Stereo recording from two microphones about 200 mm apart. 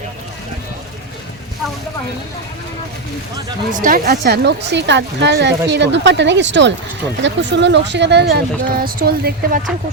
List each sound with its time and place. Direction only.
3.7 s speech: 40° right (ahead or behind)